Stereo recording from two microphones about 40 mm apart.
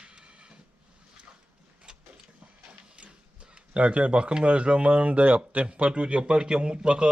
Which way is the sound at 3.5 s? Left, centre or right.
Right.